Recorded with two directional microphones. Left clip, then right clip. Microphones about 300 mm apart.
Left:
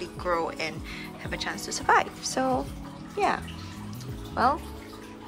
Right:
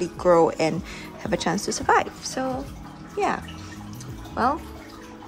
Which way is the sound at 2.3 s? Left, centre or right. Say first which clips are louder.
Left 1 dB; centre.